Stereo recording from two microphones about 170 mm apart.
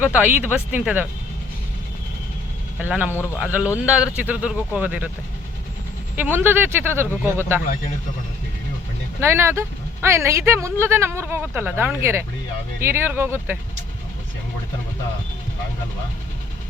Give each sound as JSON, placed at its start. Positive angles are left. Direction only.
{"t": 0.0, "sound": "speech", "side_deg": -10}
{"t": 2.8, "sound": "speech", "side_deg": -10}
{"t": 6.1, "sound": "speech", "side_deg": -10}
{"t": 9.2, "sound": "speech", "side_deg": -15}